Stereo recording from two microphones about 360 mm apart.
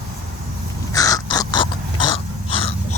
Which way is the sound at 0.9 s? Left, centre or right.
Centre.